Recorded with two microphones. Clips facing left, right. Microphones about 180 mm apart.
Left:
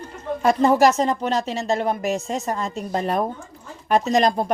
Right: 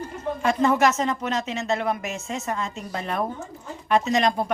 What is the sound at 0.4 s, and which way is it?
Speech, 35° left (ahead or behind).